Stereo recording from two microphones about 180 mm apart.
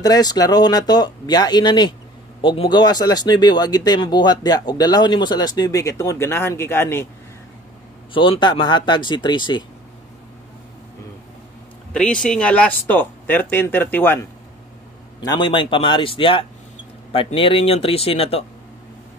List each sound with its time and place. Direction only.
0.0 s speech: 20° left (ahead or behind)
8.1 s speech: 30° left (ahead or behind)
11.9 s speech: 5° left (ahead or behind)
15.2 s speech: 25° left (ahead or behind)